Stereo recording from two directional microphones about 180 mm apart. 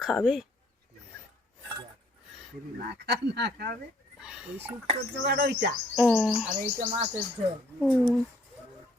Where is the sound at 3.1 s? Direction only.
70° right (ahead or behind).